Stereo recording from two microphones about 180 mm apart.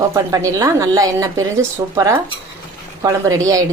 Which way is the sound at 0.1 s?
20° right (ahead or behind).